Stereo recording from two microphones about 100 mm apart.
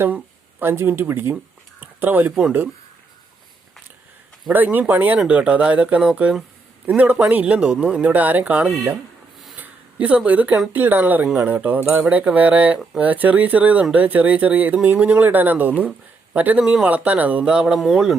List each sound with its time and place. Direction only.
0.6 s speech: 25° right (ahead or behind)
4.5 s speech: 20° right (ahead or behind)
9.6 s a sound: 15° right (ahead or behind)
10.7 s speech: 20° right (ahead or behind)